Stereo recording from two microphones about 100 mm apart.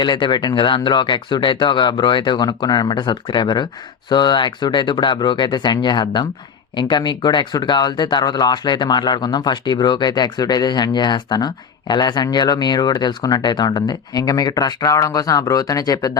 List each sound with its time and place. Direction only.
0.0 s speech: 50° left (ahead or behind)